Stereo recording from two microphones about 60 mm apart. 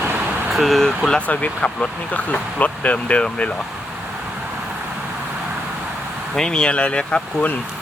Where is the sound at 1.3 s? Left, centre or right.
Left.